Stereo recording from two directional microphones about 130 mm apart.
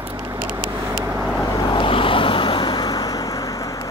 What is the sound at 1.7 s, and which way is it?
Vehicle, 40° left (ahead or behind).